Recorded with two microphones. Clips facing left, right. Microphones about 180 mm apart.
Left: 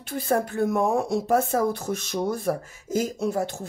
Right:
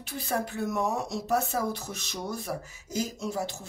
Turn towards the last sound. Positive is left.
turn(degrees=55)  # may be behind; listen again after turning